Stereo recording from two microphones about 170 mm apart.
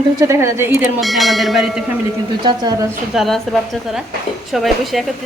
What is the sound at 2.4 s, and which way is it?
Speech, 25° right (ahead or behind).